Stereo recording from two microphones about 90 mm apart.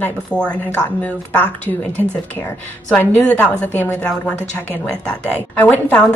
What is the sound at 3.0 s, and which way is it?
A woman's voice, 15° left (ahead or behind).